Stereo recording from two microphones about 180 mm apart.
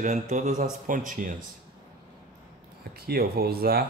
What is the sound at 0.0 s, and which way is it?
A man's voice, 40° right (ahead or behind).